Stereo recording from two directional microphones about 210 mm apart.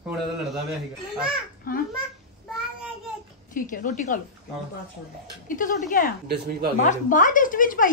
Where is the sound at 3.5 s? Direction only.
40° left (ahead or behind).